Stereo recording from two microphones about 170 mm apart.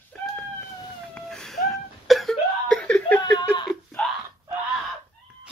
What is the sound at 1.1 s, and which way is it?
Cough, 5° left (ahead or behind).